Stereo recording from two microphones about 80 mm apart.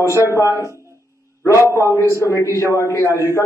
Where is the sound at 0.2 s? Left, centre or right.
Left.